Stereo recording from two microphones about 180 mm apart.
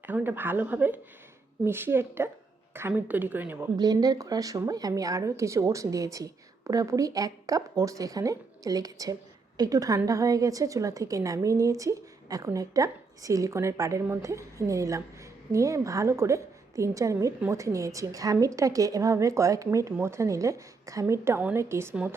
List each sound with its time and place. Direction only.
0.0 s a woman's voice: 10° right (ahead or behind)
3.8 s a woman's voice: 20° right (ahead or behind)